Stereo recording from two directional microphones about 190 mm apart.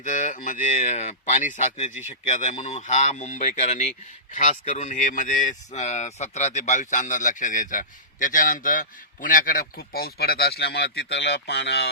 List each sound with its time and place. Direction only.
0.0 s speech: 40° left (ahead or behind); by 11.9 s 65° left (ahead or behind)